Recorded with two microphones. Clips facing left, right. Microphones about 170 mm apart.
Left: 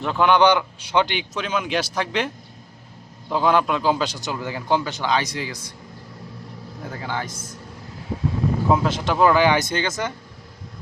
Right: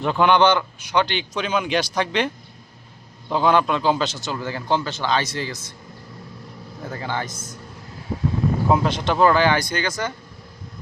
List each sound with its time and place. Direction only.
0.0 s speech: centre (ahead or behind)
0.8 s speech: 30° left (ahead or behind)
1.3 s a man's voice: centre (ahead or behind)
6.8 s speech: centre (ahead or behind)
8.7 s a man's voice: 5° left (ahead or behind); by 10.1 s 25° left (ahead or behind)